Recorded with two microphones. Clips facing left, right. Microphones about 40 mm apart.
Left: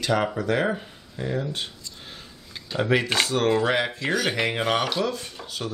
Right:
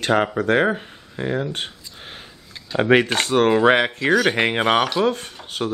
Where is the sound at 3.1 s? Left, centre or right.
Right.